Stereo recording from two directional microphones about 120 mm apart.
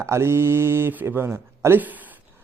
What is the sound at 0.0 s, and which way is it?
Speech, 20° right (ahead or behind).